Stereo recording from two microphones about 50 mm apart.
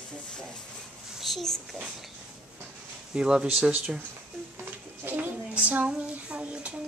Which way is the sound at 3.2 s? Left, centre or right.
Centre.